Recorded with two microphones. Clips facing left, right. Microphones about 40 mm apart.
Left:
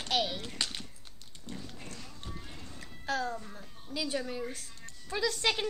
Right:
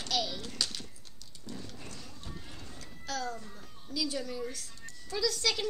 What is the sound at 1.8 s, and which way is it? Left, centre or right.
Horse, left.